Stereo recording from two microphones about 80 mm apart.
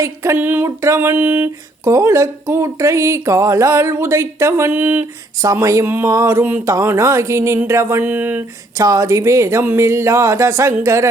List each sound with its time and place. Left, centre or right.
0.0 s speech: right
0.3 s speech: right
1.8 s speech: right
4.7 s speech: right
5.4 s speech: right
5.8 s speech: right
6.1 s speech: right
8.0 s speech: right
8.8 s speech: right